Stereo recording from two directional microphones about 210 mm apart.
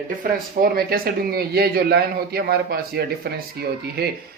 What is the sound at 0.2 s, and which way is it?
Speech, 45° right (ahead or behind).